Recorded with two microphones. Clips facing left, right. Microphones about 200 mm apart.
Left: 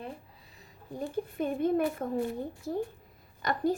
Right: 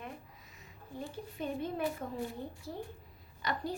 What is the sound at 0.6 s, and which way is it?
A woman's voice, 50° left (ahead or behind).